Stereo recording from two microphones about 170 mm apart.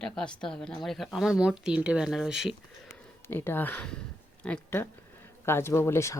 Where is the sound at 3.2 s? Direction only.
15° left (ahead or behind).